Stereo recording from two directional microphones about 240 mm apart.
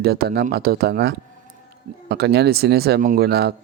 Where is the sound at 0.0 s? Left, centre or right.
Right.